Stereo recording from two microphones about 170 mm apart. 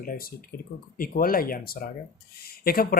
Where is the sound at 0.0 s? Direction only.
60° left (ahead or behind).